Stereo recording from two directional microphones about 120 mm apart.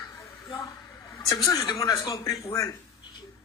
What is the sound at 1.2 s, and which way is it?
Speech, 30° left (ahead or behind).